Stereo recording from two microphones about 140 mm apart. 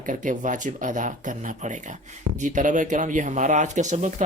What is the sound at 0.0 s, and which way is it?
Speech, 65° right (ahead or behind).